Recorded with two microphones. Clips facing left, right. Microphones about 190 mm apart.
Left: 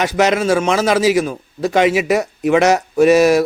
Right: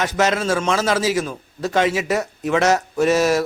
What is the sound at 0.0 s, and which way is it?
A man's voice, 15° left (ahead or behind).